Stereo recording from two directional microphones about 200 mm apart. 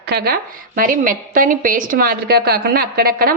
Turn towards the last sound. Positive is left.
turn(degrees=-50)  # may be behind; listen again after turning